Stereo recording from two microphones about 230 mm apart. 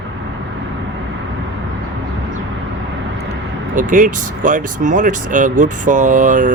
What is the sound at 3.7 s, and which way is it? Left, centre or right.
Speech, right.